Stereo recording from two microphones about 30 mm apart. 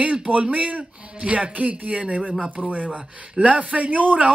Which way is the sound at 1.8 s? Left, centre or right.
Right.